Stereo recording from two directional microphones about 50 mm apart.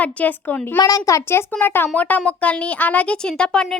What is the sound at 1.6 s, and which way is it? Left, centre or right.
Speech, left.